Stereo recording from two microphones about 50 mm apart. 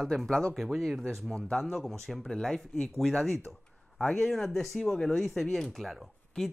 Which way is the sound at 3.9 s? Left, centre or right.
Centre.